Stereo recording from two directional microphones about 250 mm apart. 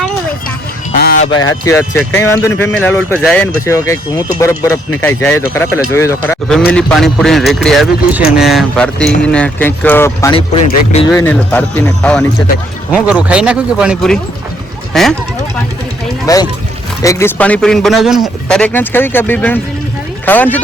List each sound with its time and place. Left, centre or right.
0.9 s honk: left
1.3 s a man's voice: centre
11.1 s a man's voice: centre
12.9 s a man's voice: centre
16.2 s a man's voice: centre